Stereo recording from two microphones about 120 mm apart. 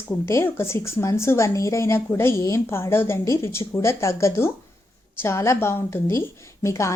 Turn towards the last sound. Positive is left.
turn(degrees=25)  # may be behind; listen again after turning